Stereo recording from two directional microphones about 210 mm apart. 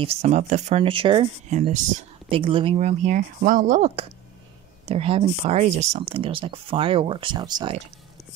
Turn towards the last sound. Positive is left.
turn(degrees=-20)  # may be behind; listen again after turning